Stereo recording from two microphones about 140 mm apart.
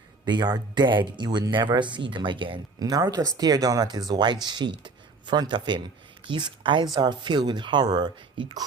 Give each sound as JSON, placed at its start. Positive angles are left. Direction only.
{"t": 0.3, "sound": "speech", "side_deg": -30}